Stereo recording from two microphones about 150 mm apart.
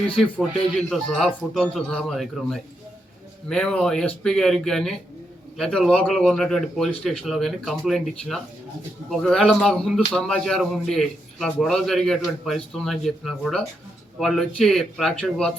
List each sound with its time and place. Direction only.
0.8 s a man's voice: centre (ahead or behind)